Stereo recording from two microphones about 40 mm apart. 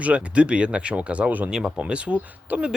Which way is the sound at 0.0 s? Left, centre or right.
Right.